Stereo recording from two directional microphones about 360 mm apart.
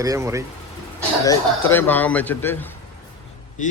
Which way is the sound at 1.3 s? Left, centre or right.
Centre.